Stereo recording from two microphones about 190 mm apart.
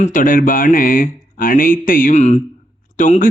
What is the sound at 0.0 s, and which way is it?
A man's voice, 45° left (ahead or behind).